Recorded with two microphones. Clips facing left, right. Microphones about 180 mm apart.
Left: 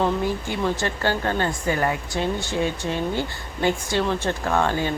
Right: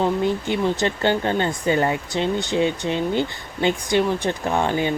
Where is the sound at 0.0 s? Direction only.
20° right (ahead or behind).